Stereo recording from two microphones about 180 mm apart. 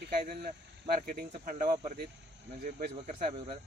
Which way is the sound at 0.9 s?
50° right (ahead or behind).